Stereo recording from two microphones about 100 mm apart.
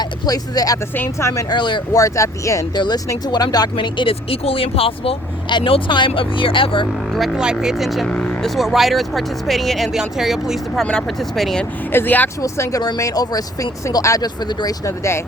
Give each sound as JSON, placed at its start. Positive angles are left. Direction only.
{"t": 0.0, "sound": "speech", "side_deg": 40}
{"t": 0.9, "sound": "speech", "side_deg": 25}
{"t": 1.5, "sound": "speech", "side_deg": 50}
{"t": 1.9, "sound": "speech", "side_deg": 35}
{"t": 2.7, "sound": "speech", "side_deg": 45}
{"t": 7.1, "sound": "speech", "side_deg": -5}
{"t": 11.9, "sound": "speech", "side_deg": 20}
{"t": 12.4, "sound": "speech", "side_deg": 30}